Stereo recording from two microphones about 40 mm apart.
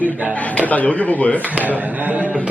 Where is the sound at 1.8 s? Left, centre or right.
Right.